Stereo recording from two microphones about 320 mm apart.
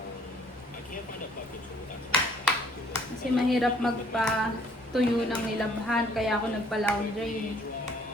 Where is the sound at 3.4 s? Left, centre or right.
Centre.